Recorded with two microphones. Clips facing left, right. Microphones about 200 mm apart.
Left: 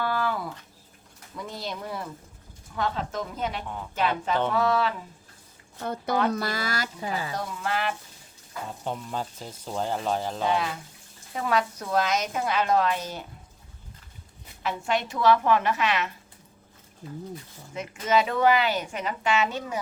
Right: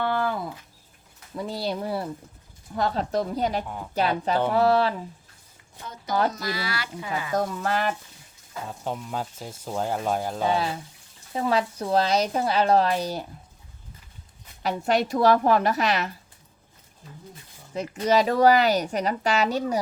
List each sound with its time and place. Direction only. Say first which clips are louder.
0.0 s a sound: right 2 dB; 25° right (ahead or behind)
1.4 s speech: right 6 dB; 35° right (ahead or behind)
5.8 s speech: left 4 dB; 60° left (ahead or behind)
6.3 s speech: left 2 dB; 45° left (ahead or behind)
7.3 s speech: right 5 dB; 45° right (ahead or behind)
8.8 s speech: right 1 dB; 5° right (ahead or behind)
10.5 s speech: right 2 dB; 30° right (ahead or behind)
14.6 s speech: right 4 dB; 40° right (ahead or behind)
17.7 s speech: right 3 dB; 35° right (ahead or behind)